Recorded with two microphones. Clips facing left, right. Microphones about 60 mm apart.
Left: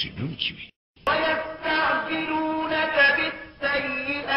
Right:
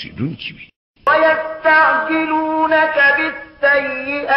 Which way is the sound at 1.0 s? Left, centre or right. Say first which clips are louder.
Right 10 dB; right.